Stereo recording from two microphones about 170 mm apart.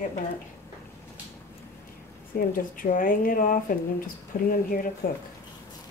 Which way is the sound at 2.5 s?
55° left (ahead or behind).